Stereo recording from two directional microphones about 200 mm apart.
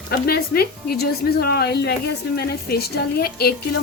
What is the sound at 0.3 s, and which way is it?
A woman's voice, 50° left (ahead or behind).